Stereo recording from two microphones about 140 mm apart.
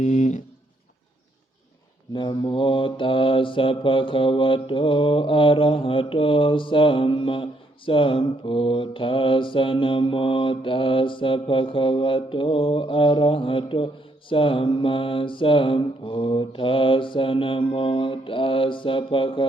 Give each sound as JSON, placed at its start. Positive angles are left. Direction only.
{"t": 0.0, "sound": "speech", "side_deg": 55}
{"t": 2.1, "sound": "mantra", "side_deg": 35}